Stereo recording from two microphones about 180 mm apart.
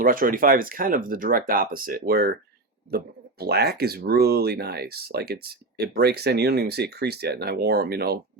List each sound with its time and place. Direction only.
0.0 s speech: 50° right (ahead or behind)